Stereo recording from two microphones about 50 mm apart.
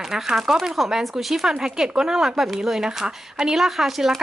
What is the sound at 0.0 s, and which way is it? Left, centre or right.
Speech, centre.